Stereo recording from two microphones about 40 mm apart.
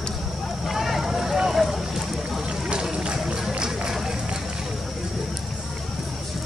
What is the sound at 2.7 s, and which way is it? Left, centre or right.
Run, right.